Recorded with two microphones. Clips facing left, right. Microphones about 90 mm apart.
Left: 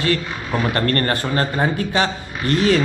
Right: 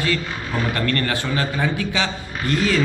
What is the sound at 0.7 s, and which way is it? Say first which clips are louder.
Speech: left 3 dB; 45° left (ahead or behind).